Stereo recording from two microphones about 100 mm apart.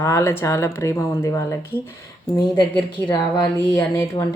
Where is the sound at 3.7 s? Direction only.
30° left (ahead or behind).